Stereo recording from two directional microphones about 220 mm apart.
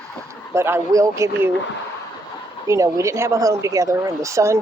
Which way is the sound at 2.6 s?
15° right (ahead or behind).